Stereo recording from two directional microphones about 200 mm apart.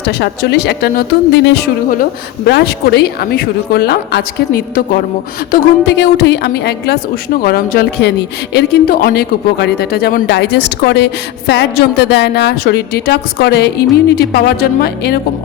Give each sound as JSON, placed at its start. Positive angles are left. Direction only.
{"t": 0.0, "sound": "speech", "side_deg": 55}